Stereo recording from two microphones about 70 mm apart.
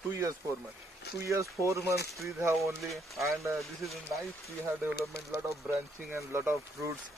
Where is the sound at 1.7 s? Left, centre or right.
Right.